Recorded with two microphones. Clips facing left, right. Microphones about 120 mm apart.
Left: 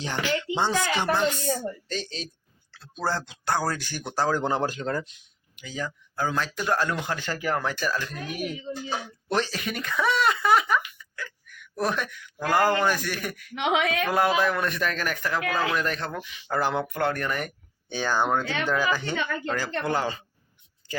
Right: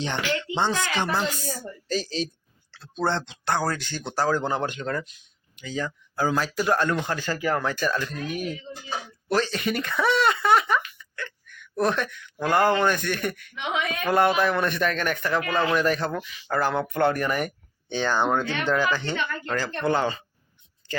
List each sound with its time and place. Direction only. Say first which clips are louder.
0.0 s speech: even; 10° left (ahead or behind)
1.9 s speech: right 6 dB; 5° right (ahead or behind); by 5.1 s 30° left (ahead or behind)
5.5 s speech: right 3 dB; 10° left (ahead or behind)
6.1 s speech: right 3 dB; 5° right (ahead or behind)
7.2 s speech: right 3 dB; 10° right (ahead or behind)
7.5 s speech: right 1 dB; 10° left (ahead or behind)
9.5 s speech: right 4 dB; centre (ahead or behind)
10.9 s a sound: right 2 dB; 5° left (ahead or behind)
11.7 s speech: right 3 dB; 5° left (ahead or behind)
13.6 s speech: left 5 dB; 90° left
14.1 s speech: right 5 dB; centre (ahead or behind)
16.5 s speech: right 1 dB; 15° left (ahead or behind)
17.0 s speech: right 7 dB; 5° right (ahead or behind)
17.8 s speech: right 2 dB; 10° left (ahead or behind)